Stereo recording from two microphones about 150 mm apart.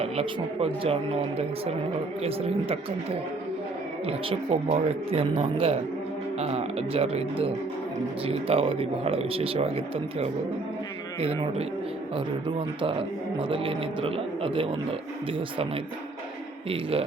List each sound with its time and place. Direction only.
0.0 s speech: 40° right (ahead or behind)
4.0 s speech: 40° right (ahead or behind)